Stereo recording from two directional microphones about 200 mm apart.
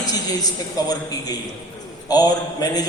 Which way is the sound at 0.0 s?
20° left (ahead or behind).